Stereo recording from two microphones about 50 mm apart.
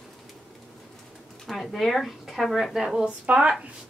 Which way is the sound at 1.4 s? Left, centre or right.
Centre.